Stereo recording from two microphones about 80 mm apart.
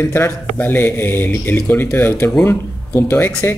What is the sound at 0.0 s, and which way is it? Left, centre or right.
A man's voice, left.